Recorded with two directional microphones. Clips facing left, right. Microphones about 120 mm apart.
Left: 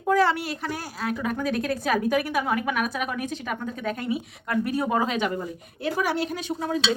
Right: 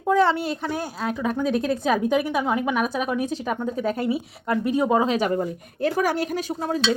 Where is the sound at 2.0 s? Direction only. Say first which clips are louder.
Right 2 dB; 25° right (ahead or behind).